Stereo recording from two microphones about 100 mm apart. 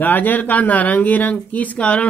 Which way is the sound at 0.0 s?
20° left (ahead or behind).